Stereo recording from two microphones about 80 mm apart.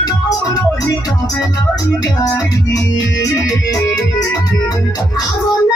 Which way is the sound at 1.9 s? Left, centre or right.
Left.